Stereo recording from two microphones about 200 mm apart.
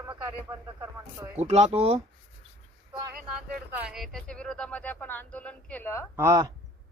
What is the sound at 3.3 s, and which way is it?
Speech, 5° right (ahead or behind).